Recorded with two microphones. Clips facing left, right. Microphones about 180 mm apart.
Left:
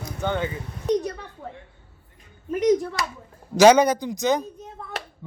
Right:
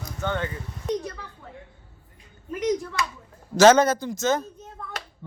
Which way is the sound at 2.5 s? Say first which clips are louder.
Left 6 dB; 40° left (ahead or behind).